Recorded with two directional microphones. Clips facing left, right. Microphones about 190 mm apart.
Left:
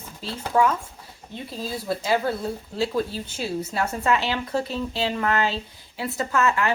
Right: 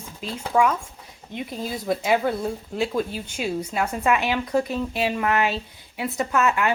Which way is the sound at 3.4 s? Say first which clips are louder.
Right 1 dB; 15° right (ahead or behind).